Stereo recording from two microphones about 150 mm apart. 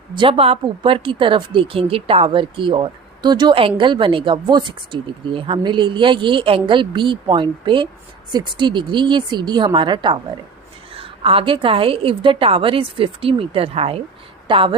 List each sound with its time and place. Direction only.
0.1 s speech: 35° right (ahead or behind)